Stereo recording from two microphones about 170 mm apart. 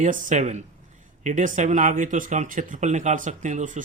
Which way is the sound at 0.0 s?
45° right (ahead or behind).